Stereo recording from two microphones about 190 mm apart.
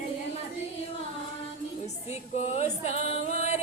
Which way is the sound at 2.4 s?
35° left (ahead or behind).